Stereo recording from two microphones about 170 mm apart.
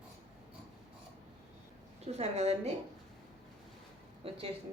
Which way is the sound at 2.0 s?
40° right (ahead or behind).